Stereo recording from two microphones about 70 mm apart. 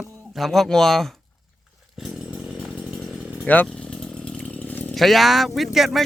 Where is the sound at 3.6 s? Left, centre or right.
Centre.